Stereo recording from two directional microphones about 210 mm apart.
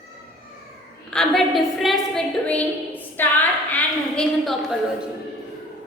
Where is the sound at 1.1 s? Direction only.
Centre (ahead or behind).